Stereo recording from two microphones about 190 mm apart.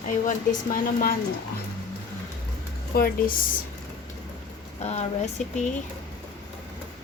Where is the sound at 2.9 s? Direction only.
50° left (ahead or behind).